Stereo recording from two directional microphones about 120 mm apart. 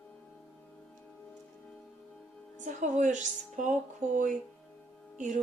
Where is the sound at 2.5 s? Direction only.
90° right.